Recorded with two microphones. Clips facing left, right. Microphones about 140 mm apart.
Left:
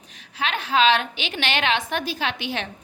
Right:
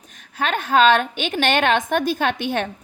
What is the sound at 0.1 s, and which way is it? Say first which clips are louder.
A woman's voice: right 4 dB; 50° right (ahead or behind).